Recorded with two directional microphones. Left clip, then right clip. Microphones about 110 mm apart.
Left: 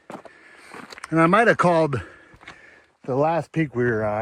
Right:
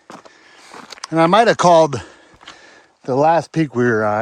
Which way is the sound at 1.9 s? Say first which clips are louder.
Right 3 dB; 45° right (ahead or behind).